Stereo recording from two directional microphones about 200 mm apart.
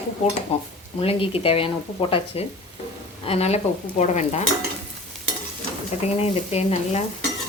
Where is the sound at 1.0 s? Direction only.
30° left (ahead or behind).